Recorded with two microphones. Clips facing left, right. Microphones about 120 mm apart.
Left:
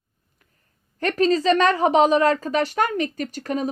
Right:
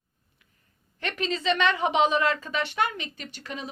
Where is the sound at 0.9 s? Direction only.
40° left (ahead or behind).